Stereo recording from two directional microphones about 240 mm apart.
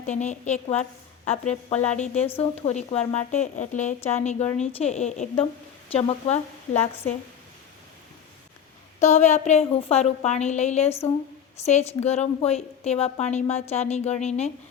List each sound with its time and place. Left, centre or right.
0.0 s a woman's voice: left
9.0 s a woman's voice: left